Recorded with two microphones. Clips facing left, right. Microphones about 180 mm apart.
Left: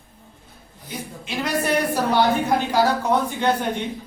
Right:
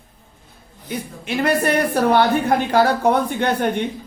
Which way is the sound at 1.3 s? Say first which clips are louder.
Right 4 dB; 60° right (ahead or behind).